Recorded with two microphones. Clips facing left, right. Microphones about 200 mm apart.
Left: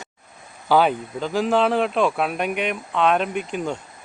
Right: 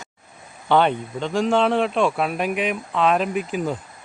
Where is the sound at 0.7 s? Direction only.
5° left (ahead or behind).